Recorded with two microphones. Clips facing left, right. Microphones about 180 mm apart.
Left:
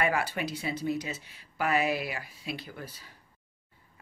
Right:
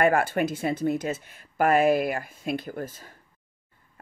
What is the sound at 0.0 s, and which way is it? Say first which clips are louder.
Speech: right 7 dB; 50° right (ahead or behind).